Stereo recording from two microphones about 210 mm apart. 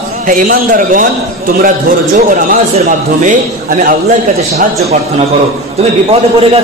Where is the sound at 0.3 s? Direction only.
40° right (ahead or behind).